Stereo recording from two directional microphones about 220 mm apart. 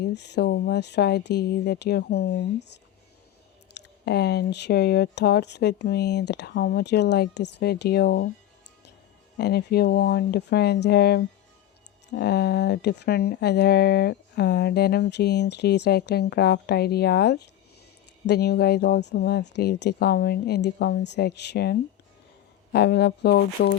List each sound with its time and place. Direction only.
0.0 s speech: 50° left (ahead or behind)
3.8 s speech: 50° left (ahead or behind)
9.4 s speech: 45° left (ahead or behind)